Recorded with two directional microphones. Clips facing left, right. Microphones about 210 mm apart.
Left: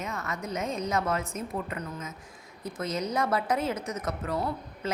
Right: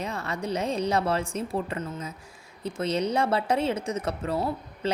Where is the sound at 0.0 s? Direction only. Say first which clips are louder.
Right 3 dB; 30° right (ahead or behind).